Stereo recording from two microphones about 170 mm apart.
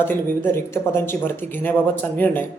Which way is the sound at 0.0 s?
10° left (ahead or behind).